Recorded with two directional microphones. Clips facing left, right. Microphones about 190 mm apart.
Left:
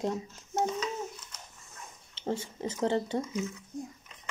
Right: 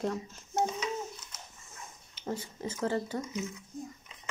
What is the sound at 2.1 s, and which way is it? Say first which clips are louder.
Speech: left 3 dB; 25° left (ahead or behind).